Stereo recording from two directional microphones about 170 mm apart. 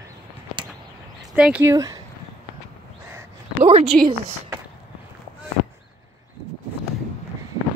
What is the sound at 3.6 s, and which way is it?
Speech, 35° right (ahead or behind).